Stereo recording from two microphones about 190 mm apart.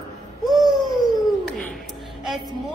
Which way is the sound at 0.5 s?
20° right (ahead or behind).